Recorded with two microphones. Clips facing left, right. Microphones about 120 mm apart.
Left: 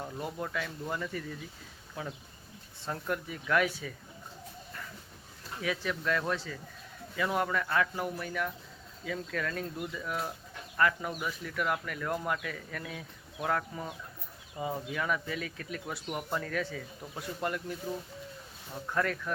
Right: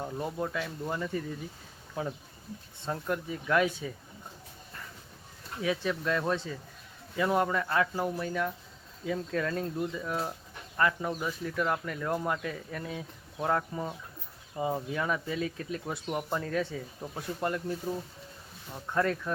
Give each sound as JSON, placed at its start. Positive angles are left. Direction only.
{"t": 0.2, "sound": "speech", "side_deg": -25}
{"t": 5.6, "sound": "speech", "side_deg": -25}
{"t": 18.9, "sound": "speech", "side_deg": -20}